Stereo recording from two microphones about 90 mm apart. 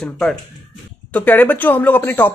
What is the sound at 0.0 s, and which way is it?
Speech, 5° left (ahead or behind).